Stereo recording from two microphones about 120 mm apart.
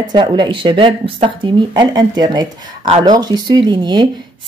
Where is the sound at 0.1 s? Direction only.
40° right (ahead or behind).